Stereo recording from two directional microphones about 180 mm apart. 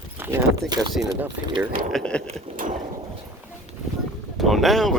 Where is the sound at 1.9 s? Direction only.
5° left (ahead or behind).